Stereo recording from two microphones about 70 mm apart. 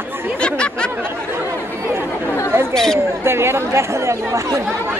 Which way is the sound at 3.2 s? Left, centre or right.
Right.